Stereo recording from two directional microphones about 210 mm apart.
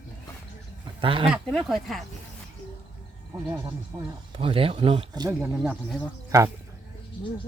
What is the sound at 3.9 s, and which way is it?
Speech, 15° right (ahead or behind).